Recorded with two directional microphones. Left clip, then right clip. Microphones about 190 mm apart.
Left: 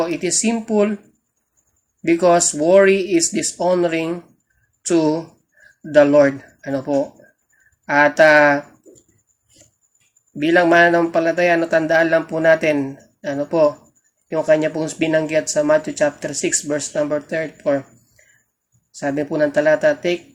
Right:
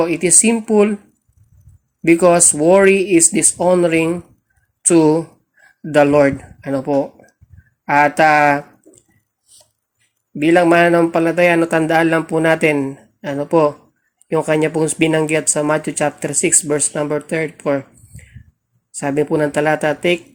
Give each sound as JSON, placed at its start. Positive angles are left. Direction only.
{"t": 0.0, "sound": "speech", "side_deg": -40}
{"t": 2.0, "sound": "speech", "side_deg": -40}
{"t": 10.4, "sound": "speech", "side_deg": -40}
{"t": 18.9, "sound": "speech", "side_deg": -45}